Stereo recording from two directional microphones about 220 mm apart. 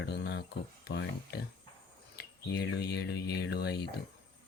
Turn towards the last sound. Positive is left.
turn(degrees=45)  # may be behind; listen again after turning